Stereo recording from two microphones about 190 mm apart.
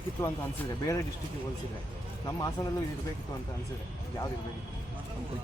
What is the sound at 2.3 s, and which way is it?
Speech, 20° left (ahead or behind).